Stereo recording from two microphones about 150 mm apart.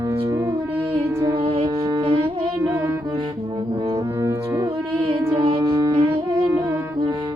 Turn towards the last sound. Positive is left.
turn(degrees=-30)  # may be behind; listen again after turning